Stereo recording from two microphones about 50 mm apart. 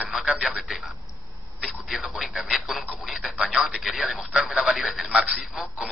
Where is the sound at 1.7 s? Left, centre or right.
Centre.